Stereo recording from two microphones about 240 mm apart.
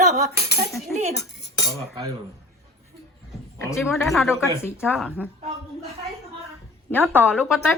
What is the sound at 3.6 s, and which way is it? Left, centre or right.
Speech, centre.